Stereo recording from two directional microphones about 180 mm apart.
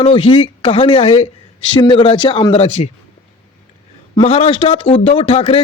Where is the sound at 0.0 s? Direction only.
30° left (ahead or behind).